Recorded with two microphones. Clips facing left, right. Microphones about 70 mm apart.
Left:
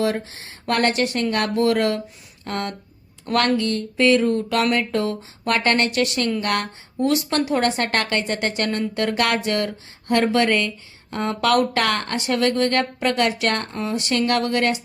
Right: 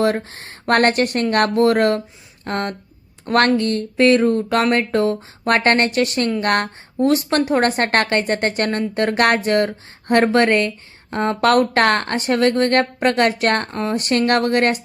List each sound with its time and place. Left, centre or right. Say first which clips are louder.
0.0 s a woman's voice: right 4 dB; right